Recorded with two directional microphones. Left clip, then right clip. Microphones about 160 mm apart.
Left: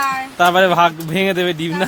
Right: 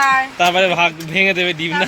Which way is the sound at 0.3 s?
30° left (ahead or behind).